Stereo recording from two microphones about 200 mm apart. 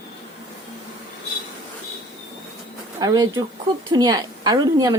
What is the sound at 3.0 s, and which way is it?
A woman's voice, 20° right (ahead or behind).